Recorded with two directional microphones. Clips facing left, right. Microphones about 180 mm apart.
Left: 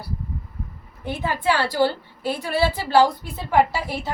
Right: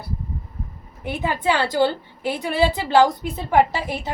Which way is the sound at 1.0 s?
15° right (ahead or behind).